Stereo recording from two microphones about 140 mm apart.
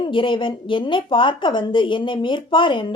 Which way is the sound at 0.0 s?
35° left (ahead or behind).